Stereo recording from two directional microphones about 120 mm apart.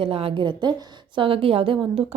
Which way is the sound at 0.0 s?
50° right (ahead or behind).